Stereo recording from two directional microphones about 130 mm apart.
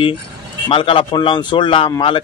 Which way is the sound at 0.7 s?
45° left (ahead or behind).